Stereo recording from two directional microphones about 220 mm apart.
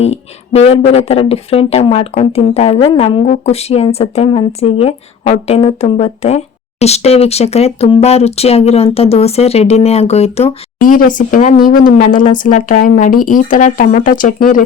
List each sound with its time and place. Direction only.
0.0 s speech: 30° left (ahead or behind)